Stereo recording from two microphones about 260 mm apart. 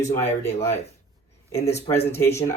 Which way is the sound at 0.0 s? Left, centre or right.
Left.